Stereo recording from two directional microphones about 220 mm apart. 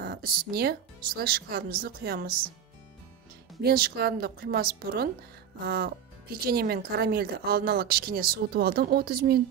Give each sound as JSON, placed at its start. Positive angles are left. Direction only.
{"t": 0.0, "sound": "a woman's voice", "side_deg": -45}
{"t": 3.6, "sound": "a woman's voice", "side_deg": -45}